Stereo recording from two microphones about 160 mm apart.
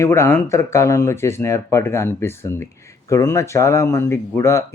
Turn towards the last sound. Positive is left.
turn(degrees=20)  # may be behind; listen again after turning